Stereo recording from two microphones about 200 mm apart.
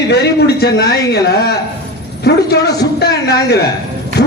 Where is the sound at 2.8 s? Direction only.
55° left (ahead or behind).